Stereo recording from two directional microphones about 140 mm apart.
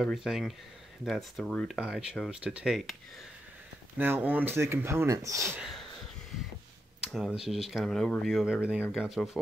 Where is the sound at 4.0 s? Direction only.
10° right (ahead or behind).